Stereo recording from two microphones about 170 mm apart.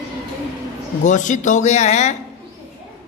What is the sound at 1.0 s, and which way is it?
Speech, 45° left (ahead or behind).